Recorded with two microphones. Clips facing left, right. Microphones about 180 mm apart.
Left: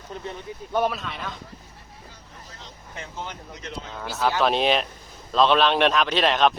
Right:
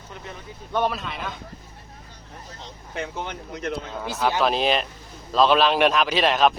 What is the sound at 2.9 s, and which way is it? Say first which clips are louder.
Speech: right 5 dB; 65° right (ahead or behind).